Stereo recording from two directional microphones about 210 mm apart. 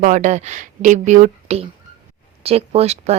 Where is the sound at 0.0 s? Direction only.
35° right (ahead or behind).